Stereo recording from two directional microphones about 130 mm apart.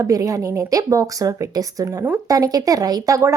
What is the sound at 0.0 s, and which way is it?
Speech, 25° right (ahead or behind).